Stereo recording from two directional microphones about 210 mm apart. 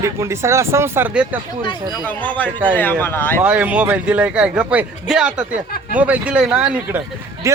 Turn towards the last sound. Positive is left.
turn(degrees=-15)  # may be behind; listen again after turning